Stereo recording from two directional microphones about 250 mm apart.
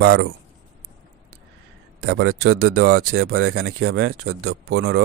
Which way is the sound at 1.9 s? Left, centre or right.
Right.